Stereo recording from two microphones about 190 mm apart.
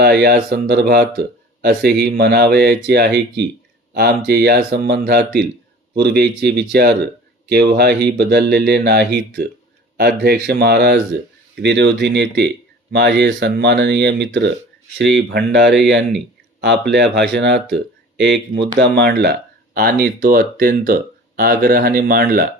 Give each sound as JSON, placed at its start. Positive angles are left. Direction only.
{"t": 0.0, "sound": "speech", "side_deg": -55}